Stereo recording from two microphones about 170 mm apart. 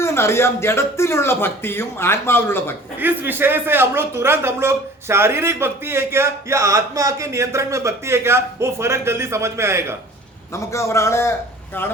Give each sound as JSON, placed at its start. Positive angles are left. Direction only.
{"t": 0.0, "sound": "a man's voice", "side_deg": 15}
{"t": 3.0, "sound": "speech", "side_deg": -10}
{"t": 10.5, "sound": "a man's voice", "side_deg": 15}